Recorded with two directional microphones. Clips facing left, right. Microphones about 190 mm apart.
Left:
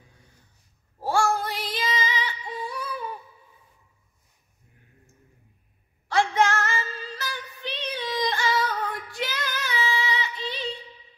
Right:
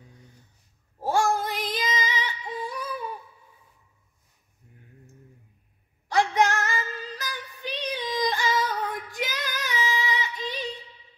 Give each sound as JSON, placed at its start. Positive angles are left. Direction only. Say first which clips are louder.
{"t": 1.0, "sound": "child singing", "louder": "even", "side_deg": -20}
{"t": 6.0, "sound": "female singing", "louder": "even", "side_deg": -15}